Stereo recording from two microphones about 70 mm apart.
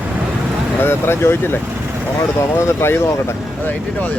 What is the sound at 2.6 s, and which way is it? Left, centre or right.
Speech, left.